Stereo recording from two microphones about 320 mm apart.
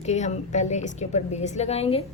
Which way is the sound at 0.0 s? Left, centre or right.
Left.